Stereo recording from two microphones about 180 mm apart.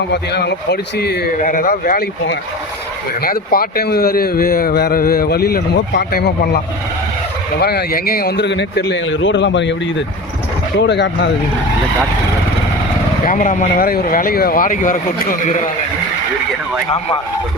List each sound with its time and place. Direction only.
0.1 s a man's voice: 70° left (ahead or behind); by 2.0 s 50° left (ahead or behind)
3.2 s a man's voice: 55° left (ahead or behind)
7.6 s a man's voice: 60° left (ahead or behind); by 9.7 s 85° left
10.8 s a man's voice: 75° left (ahead or behind)
13.2 s speech: 45° left (ahead or behind)